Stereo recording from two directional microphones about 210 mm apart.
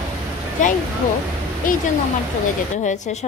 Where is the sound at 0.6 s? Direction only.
35° left (ahead or behind).